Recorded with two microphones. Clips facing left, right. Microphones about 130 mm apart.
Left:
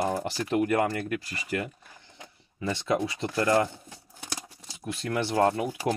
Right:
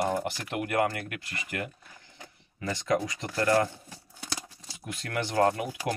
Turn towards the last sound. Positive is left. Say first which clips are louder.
# left 1 dB
turn(degrees=25)  # may be behind; listen again after turning